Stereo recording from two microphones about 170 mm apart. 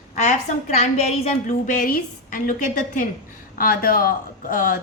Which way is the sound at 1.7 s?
55° left (ahead or behind).